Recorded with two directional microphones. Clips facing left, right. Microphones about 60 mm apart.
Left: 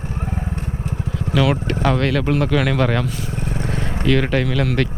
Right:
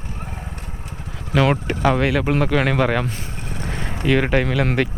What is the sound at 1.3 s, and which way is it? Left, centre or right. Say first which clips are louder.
Speech: right 1 dB; right.